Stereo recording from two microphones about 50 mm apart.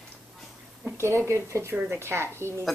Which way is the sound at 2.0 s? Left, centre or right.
Right.